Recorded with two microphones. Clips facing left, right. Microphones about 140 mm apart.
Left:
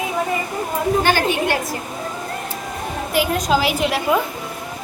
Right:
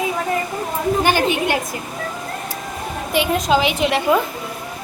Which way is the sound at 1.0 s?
20° right (ahead or behind).